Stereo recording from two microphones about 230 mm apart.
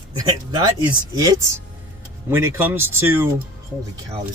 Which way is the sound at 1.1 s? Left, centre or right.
Centre.